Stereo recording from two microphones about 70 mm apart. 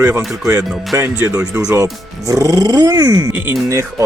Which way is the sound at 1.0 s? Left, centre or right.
Right.